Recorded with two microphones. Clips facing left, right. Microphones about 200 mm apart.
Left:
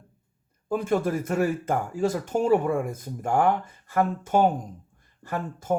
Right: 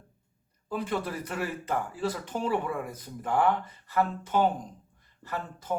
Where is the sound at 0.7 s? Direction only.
45° left (ahead or behind).